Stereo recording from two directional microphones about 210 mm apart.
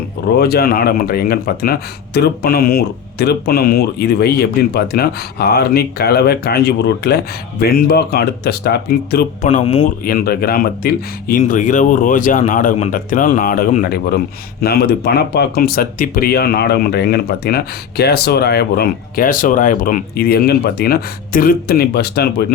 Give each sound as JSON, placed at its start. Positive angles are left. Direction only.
{"t": 0.3, "sound": "speech", "side_deg": 50}
{"t": 9.5, "sound": "speech", "side_deg": 30}
{"t": 9.8, "sound": "speech", "side_deg": 45}